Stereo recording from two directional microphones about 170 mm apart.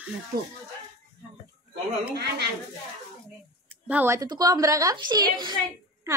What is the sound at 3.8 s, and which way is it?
A woman's voice, 10° right (ahead or behind).